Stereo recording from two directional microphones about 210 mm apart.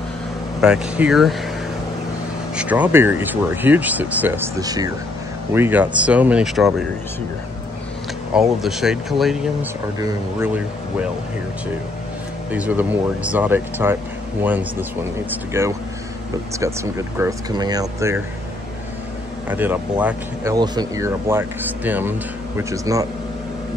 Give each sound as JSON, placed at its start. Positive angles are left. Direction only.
{"t": 0.6, "sound": "speech", "side_deg": -5}
{"t": 2.5, "sound": "speech", "side_deg": -5}
{"t": 8.4, "sound": "speech", "side_deg": 0}
{"t": 9.9, "sound": "speech", "side_deg": -15}
{"t": 12.4, "sound": "speech", "side_deg": -5}
{"t": 17.2, "sound": "speech", "side_deg": -15}
{"t": 19.5, "sound": "speech", "side_deg": -10}
{"t": 20.5, "sound": "speech", "side_deg": -20}